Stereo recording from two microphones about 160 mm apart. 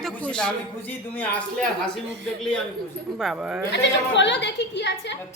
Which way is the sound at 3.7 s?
90° left.